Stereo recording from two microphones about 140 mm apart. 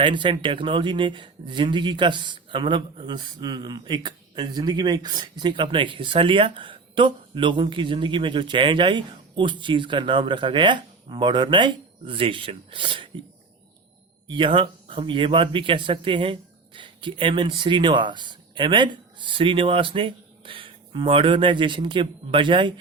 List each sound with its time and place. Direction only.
0.0 s speech: 35° right (ahead or behind)
14.3 s speech: 35° right (ahead or behind)